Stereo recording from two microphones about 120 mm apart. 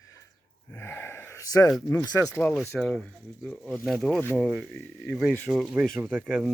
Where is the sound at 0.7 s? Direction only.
20° left (ahead or behind).